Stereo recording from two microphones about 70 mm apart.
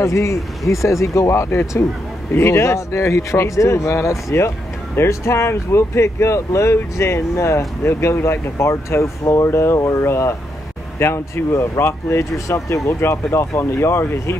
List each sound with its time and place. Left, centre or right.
0.0 s speech: left